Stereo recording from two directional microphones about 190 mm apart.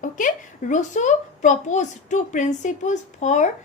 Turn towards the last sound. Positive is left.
turn(degrees=40)  # may be behind; listen again after turning